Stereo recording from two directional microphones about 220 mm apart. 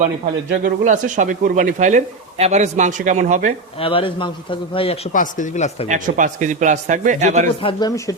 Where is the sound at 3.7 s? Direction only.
25° left (ahead or behind).